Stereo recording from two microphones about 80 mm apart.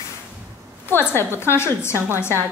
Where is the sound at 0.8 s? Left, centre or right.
Left.